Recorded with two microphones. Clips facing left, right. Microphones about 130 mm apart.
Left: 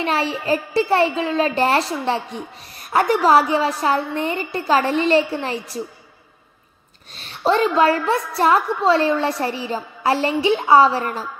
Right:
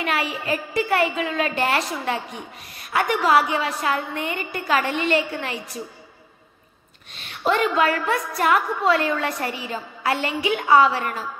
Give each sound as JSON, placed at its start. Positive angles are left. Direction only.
{"t": 0.0, "sound": "a woman's voice", "side_deg": 30}
{"t": 7.2, "sound": "a woman's voice", "side_deg": 35}